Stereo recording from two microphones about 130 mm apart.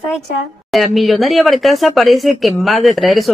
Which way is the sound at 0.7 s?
Centre (ahead or behind).